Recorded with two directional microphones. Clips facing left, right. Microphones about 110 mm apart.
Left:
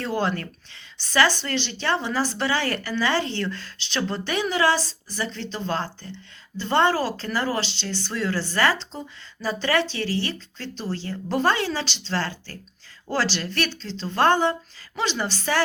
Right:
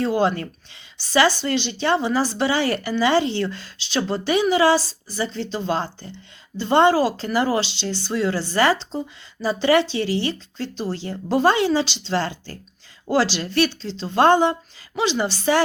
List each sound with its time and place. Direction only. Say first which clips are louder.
0.0 s a woman's voice: right 5 dB; 15° right (ahead or behind)